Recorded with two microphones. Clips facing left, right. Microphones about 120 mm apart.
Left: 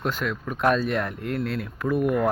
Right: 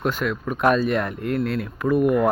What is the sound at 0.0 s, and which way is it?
Speech, 5° right (ahead or behind).